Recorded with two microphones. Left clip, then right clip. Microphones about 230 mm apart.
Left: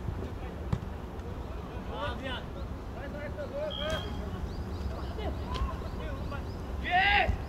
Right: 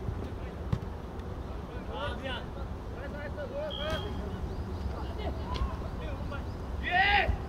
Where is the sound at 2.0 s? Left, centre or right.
Centre.